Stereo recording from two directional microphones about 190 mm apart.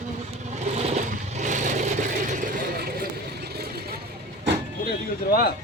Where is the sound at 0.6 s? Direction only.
35° right (ahead or behind); by 3.9 s 55° right (ahead or behind).